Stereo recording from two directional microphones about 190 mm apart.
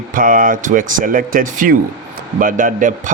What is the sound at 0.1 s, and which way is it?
A man's voice, 45° right (ahead or behind).